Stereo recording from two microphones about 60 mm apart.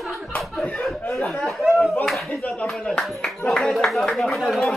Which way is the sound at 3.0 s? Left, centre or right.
Centre.